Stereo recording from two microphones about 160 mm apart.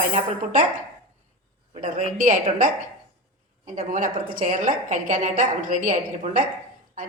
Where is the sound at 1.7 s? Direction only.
50° right (ahead or behind).